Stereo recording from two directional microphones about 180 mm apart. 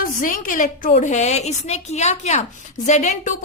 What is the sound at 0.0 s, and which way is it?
A woman's voice, 50° left (ahead or behind).